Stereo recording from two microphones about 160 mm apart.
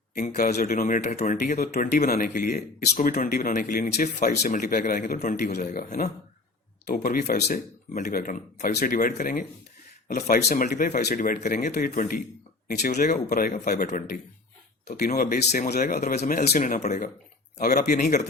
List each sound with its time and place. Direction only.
0.3 s speech: 65° left (ahead or behind); by 3.1 s 80° left
3.1 s speech: 60° left (ahead or behind)
12.6 s speech: 80° left
12.9 s speech: 50° left (ahead or behind); by 16.2 s 70° left (ahead or behind)
16.6 s speech: 55° left (ahead or behind)
17.6 s speech: 70° left (ahead or behind)